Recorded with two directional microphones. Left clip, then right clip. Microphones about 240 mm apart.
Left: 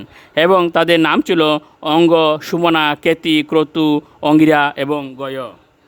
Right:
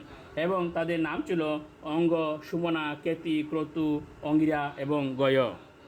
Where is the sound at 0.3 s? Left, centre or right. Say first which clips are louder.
Left 17 dB; left.